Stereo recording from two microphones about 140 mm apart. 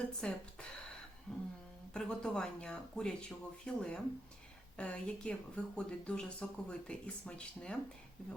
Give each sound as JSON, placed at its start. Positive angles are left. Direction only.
{"t": 0.2, "sound": "speech", "side_deg": 5}
{"t": 1.3, "sound": "a sound", "side_deg": 5}
{"t": 1.9, "sound": "speech", "side_deg": 5}